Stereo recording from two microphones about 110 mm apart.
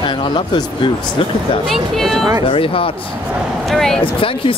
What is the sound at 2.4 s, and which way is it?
Speech, 55° left (ahead or behind).